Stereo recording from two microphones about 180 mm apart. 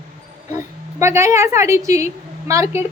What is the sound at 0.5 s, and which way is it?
A woman's voice, 15° right (ahead or behind).